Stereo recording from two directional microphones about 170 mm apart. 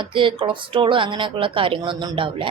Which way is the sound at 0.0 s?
30° right (ahead or behind).